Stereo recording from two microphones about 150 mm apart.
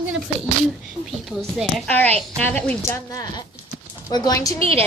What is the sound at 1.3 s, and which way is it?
Speech, centre (ahead or behind).